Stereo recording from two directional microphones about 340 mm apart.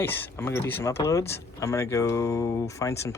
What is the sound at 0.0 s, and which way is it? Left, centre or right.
Speech, centre.